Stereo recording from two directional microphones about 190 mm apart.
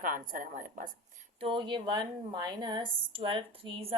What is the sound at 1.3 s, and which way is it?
A woman's voice, 25° right (ahead or behind).